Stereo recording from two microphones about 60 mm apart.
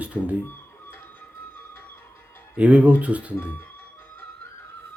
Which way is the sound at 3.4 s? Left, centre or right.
Left.